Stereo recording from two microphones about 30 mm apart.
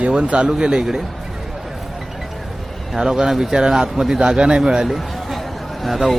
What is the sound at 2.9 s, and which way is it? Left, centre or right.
Speech, right.